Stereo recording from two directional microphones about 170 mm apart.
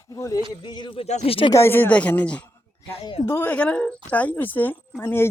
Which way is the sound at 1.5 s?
15° left (ahead or behind).